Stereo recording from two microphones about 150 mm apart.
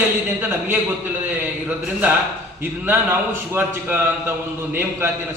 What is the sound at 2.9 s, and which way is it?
A man's voice, 15° right (ahead or behind).